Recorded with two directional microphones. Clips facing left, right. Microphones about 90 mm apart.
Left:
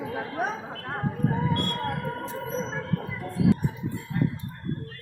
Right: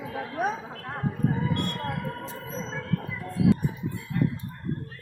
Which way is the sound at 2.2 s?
25° left (ahead or behind).